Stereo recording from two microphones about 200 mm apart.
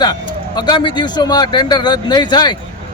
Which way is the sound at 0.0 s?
20° left (ahead or behind).